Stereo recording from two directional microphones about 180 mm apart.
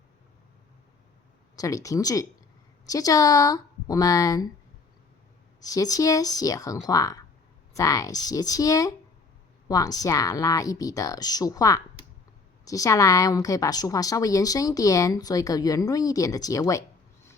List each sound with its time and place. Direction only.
1.5 s a woman's voice: 20° left (ahead or behind)
5.5 s a woman's voice: 20° left (ahead or behind)